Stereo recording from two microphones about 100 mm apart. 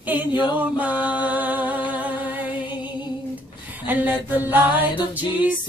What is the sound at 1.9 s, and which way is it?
Music, 15° right (ahead or behind).